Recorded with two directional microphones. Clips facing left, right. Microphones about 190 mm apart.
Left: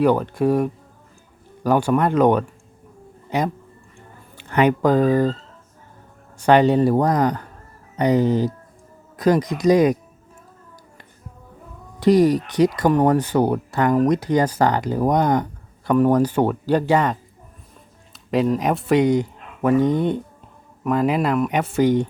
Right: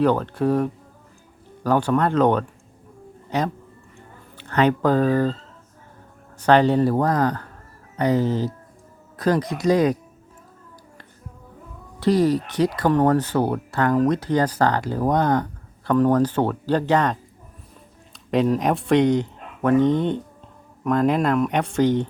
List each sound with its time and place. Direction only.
0.0 s speech: 10° left (ahead or behind)
6.4 s speech: 15° left (ahead or behind)
11.9 s speech: 15° left (ahead or behind)